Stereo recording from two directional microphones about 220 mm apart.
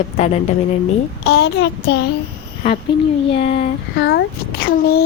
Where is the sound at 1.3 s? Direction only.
50° left (ahead or behind).